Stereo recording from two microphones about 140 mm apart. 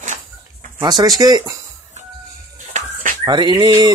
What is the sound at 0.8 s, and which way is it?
Speech, 30° right (ahead or behind).